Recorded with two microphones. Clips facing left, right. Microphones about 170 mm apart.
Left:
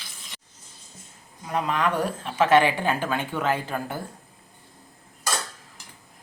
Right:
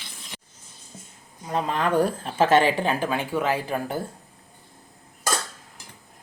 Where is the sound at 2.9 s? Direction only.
15° right (ahead or behind).